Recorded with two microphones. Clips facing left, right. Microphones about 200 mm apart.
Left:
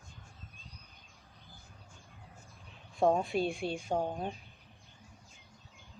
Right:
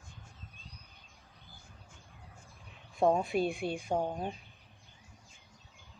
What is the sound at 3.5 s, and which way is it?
Speech, 55° right (ahead or behind).